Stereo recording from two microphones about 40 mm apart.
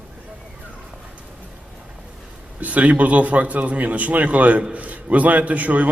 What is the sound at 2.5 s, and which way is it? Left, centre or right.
A man's voice, right.